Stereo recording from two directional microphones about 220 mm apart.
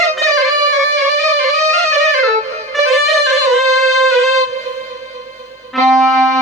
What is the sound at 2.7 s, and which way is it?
Music, centre (ahead or behind).